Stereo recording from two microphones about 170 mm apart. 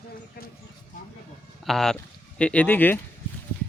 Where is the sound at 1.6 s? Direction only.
Centre (ahead or behind).